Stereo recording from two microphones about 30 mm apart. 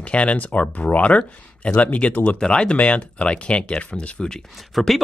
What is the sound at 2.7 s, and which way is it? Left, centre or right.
Speech, left.